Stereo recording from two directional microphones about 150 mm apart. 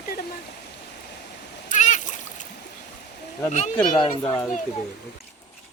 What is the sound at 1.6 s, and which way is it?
Splash, 55° left (ahead or behind).